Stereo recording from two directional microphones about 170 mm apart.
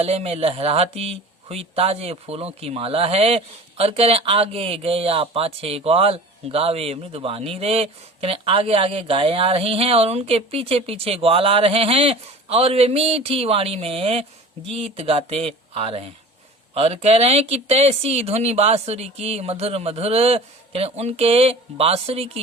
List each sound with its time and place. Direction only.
0.0 s speech: 35° right (ahead or behind)